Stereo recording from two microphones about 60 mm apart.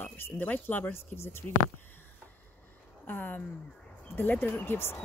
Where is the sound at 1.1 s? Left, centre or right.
Left.